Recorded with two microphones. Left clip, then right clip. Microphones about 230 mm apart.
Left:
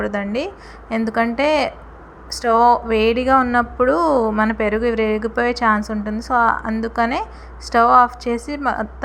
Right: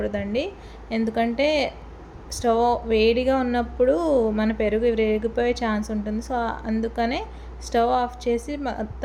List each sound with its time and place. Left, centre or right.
0.0 s a woman's voice: centre
3.9 s speech: left
4.4 s a woman's voice: centre